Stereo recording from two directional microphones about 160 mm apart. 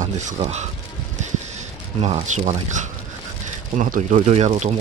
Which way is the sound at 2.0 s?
45° right (ahead or behind).